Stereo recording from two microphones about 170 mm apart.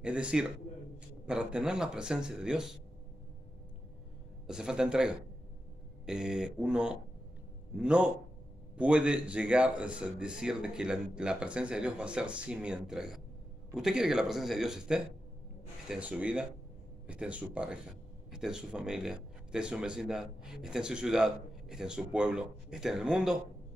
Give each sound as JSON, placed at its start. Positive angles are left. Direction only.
{"t": 0.0, "sound": "speech", "side_deg": -5}
{"t": 4.5, "sound": "speech", "side_deg": -5}